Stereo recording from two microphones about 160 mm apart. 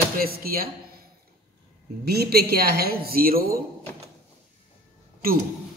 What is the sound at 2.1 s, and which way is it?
A woman's voice, 75° right (ahead or behind).